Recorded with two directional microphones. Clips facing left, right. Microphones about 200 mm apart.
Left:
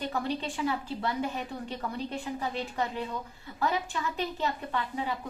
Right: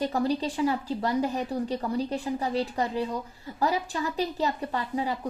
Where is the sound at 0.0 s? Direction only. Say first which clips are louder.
Right 6 dB; 35° right (ahead or behind).